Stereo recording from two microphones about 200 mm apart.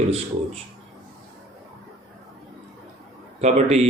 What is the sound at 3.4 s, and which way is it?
Speech, 35° right (ahead or behind).